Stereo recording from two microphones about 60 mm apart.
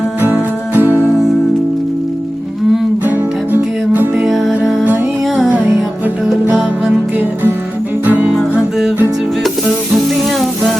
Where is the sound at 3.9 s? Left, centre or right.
Right.